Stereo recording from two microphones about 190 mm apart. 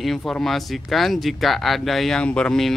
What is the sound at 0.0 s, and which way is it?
Speech, centre (ahead or behind).